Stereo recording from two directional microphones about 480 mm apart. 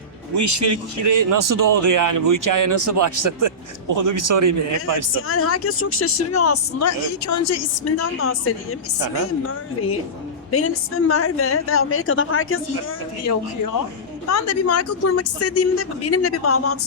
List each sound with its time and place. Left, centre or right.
0.3 s a man's voice: right
5.1 s speech: left
10.5 s speech: left
14.3 s speech: left